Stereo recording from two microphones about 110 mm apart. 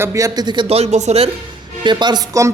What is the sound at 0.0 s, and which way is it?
Speech, 25° right (ahead or behind).